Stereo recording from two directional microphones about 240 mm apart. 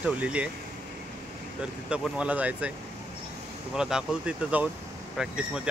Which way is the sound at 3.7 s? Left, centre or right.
Centre.